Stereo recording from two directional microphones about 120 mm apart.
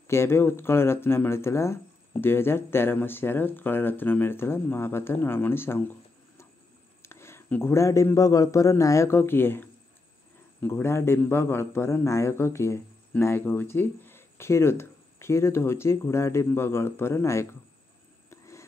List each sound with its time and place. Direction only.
0.0 s speech: 20° left (ahead or behind)
7.0 s speech: 20° left (ahead or behind)
18.3 s a sound: 25° left (ahead or behind)